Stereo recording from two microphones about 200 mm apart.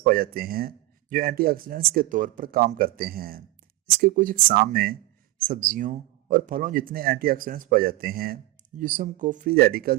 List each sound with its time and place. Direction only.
0.0 s a man's voice: 45° right (ahead or behind)